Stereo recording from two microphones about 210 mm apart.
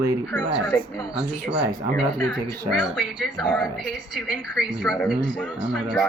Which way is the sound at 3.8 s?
Centre (ahead or behind).